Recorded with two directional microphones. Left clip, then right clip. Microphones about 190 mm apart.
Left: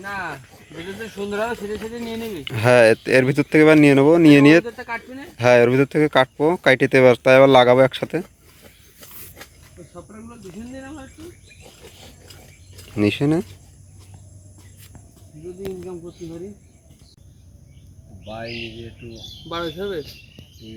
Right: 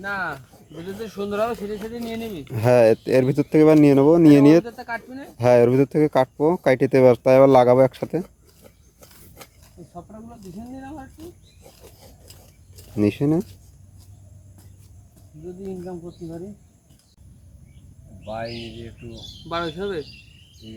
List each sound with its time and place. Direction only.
0.0 s speech: centre (ahead or behind)
1.2 s speech: 20° right (ahead or behind)
2.4 s speech: 10° right (ahead or behind)
13.0 s speech: 10° right (ahead or behind)
18.3 s speech: 35° left (ahead or behind)
19.5 s speech: centre (ahead or behind)